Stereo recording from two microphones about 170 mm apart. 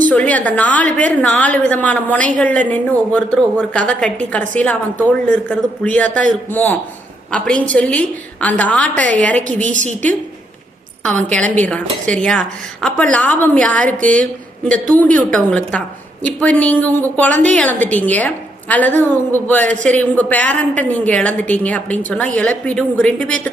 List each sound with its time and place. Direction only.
0.1 s a woman's voice: 10° left (ahead or behind)
11.0 s a woman's voice: 5° left (ahead or behind)